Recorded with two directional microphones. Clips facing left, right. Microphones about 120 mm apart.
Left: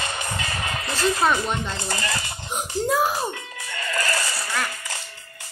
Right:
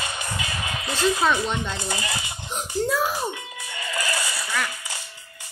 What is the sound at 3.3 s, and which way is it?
Music, 10° right (ahead or behind).